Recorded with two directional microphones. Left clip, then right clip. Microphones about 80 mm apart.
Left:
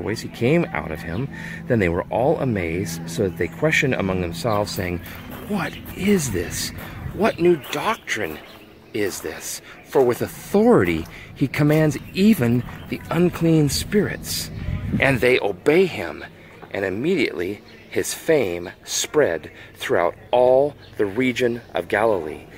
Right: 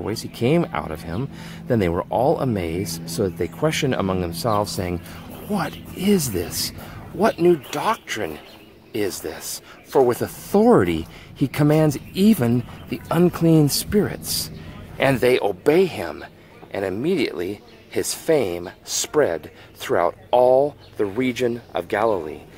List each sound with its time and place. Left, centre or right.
0.0 s speech: right
7.8 s speech: right
12.9 s speech: right
15.0 s speech: right
21.0 s speech: centre